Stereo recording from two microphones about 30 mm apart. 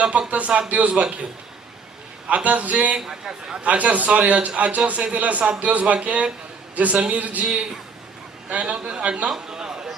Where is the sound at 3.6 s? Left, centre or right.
Right.